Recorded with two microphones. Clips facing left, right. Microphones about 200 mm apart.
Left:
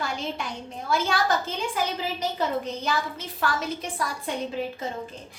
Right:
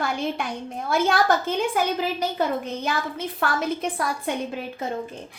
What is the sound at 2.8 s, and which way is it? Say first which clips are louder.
Speech: right 2 dB; 55° right (ahead or behind).